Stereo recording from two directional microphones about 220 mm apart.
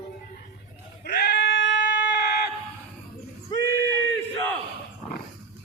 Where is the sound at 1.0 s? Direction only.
45° left (ahead or behind).